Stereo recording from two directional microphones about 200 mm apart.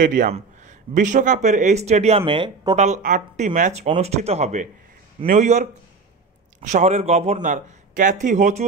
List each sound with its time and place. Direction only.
0.0 s speech: 40° right (ahead or behind); by 2.7 s 25° right (ahead or behind)
2.7 s speech: 35° right (ahead or behind)